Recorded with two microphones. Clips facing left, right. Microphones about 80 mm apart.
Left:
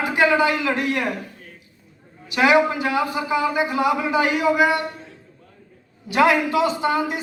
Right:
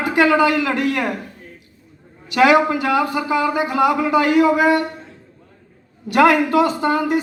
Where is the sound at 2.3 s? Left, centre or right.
Right.